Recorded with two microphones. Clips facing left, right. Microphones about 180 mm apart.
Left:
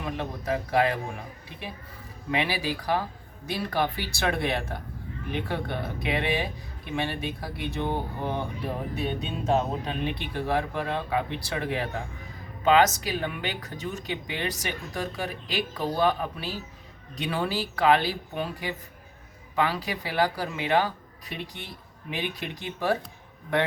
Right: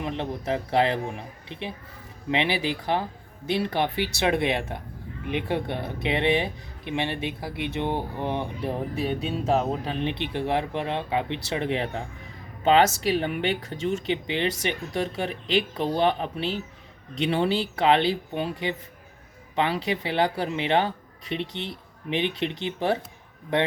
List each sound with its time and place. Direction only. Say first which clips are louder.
0.0 s speech: right 3 dB; 25° right (ahead or behind)
10.0 s speech: right 3 dB; 25° right (ahead or behind)